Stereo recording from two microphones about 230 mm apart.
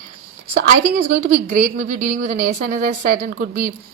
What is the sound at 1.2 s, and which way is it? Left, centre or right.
A woman's voice, right.